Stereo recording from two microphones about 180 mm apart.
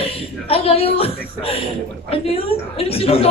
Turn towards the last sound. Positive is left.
turn(degrees=35)  # may be behind; listen again after turning